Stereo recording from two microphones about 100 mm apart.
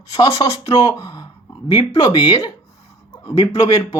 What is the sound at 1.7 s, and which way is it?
Speech, 60° left (ahead or behind).